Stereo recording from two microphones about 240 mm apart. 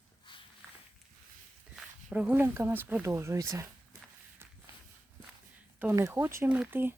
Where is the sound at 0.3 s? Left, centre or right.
Centre.